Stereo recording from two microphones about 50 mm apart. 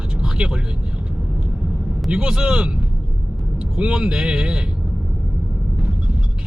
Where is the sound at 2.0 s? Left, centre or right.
Centre.